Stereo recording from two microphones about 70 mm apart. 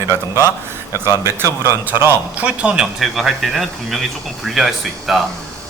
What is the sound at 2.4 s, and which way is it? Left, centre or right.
Speech, centre.